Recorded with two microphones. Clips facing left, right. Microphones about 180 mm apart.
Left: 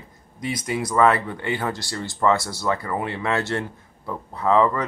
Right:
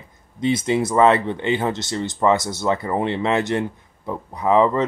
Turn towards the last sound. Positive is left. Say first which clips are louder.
# right 2 dB
turn(degrees=-15)  # may be behind; listen again after turning